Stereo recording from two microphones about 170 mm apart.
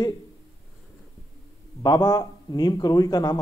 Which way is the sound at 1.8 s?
25° left (ahead or behind).